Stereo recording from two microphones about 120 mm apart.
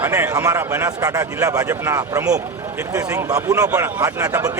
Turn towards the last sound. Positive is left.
turn(degrees=-25)  # may be behind; listen again after turning